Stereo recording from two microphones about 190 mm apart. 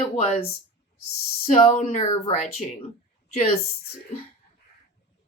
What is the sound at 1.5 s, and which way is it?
Speech, 35° left (ahead or behind).